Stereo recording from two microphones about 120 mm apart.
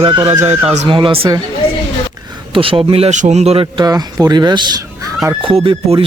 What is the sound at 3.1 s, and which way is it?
Speech, 80° right.